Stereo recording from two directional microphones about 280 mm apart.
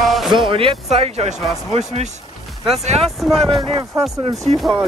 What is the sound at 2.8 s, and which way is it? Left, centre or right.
Speech, right.